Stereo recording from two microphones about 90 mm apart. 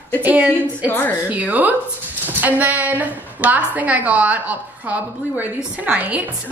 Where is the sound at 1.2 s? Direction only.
15° right (ahead or behind).